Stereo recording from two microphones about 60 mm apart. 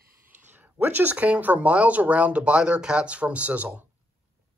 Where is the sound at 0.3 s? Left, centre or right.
Right.